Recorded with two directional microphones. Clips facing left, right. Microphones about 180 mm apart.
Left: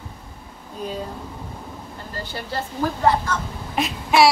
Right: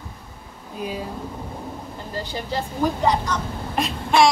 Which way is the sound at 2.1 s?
15° right (ahead or behind).